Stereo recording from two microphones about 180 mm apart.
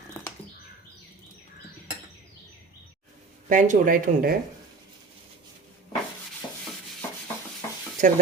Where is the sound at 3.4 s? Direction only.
45° right (ahead or behind).